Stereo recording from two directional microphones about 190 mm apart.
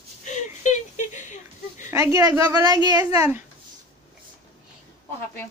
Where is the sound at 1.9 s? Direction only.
15° right (ahead or behind).